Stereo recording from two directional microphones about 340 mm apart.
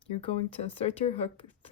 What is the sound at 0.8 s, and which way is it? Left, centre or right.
Speech, centre.